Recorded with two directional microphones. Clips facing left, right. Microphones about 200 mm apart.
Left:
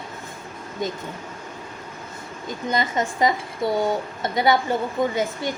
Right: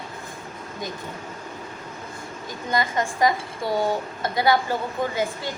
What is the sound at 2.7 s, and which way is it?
A woman's voice, 20° left (ahead or behind).